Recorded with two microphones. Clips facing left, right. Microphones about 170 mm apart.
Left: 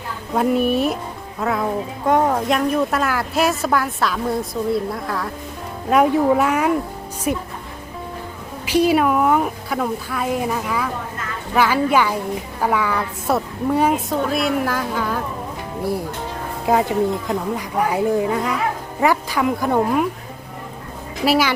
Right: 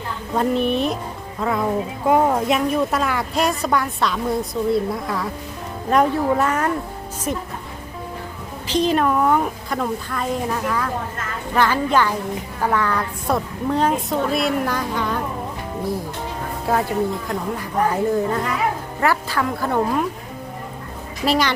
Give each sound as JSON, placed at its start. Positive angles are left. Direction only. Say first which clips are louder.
{"t": 0.3, "sound": "a woman's voice", "louder": "left 2 dB", "side_deg": 5}
{"t": 8.6, "sound": "a woman's voice", "louder": "left 3 dB", "side_deg": 10}
{"t": 16.7, "sound": "a woman's voice", "louder": "left 3 dB", "side_deg": 15}
{"t": 21.2, "sound": "a woman's voice", "louder": "left 2 dB", "side_deg": 5}